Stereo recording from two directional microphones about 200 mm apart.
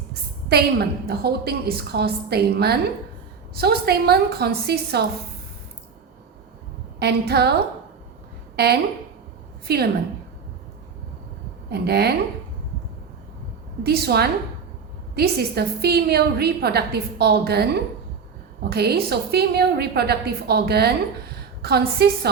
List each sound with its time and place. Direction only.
0.1 s a woman's voice: 50° right (ahead or behind)
7.0 s a woman's voice: 55° right (ahead or behind)
8.5 s a woman's voice: 55° right (ahead or behind)
11.7 s a woman's voice: 55° right (ahead or behind)
13.8 s a woman's voice: 50° right (ahead or behind)
18.7 s a woman's voice: 55° right (ahead or behind)